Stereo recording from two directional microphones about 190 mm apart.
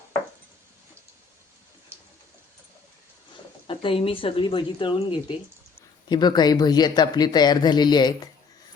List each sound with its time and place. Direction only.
3.7 s speech: 30° left (ahead or behind)